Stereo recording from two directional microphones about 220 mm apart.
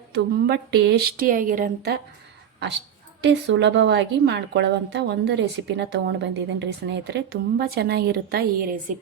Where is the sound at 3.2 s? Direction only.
55° right (ahead or behind).